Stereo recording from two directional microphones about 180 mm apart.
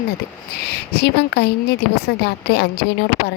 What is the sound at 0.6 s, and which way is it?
Speech, 65° left (ahead or behind).